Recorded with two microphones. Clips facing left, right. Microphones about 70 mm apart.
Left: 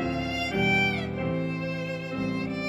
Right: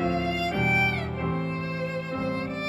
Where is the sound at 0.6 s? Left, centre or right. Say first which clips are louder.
Left 1 dB; right.